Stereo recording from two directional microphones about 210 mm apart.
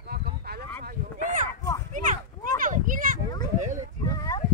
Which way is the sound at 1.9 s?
40° right (ahead or behind).